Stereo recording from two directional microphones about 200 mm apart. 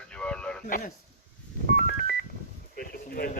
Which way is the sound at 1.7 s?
50° left (ahead or behind).